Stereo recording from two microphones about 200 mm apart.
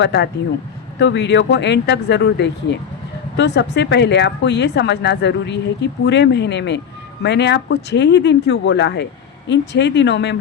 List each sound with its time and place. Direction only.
0.0 s speech: 60° left (ahead or behind)